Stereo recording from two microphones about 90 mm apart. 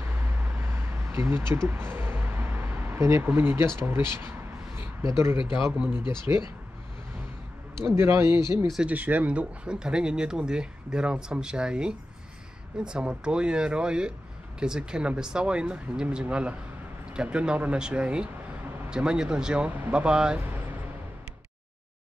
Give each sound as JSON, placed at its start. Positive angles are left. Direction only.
{"t": 0.1, "sound": "vehicle", "side_deg": -25}
{"t": 5.0, "sound": "speech", "side_deg": -30}
{"t": 7.8, "sound": "speech", "side_deg": -25}
{"t": 8.8, "sound": "speech", "side_deg": -20}
{"t": 20.3, "sound": "a sound", "side_deg": -20}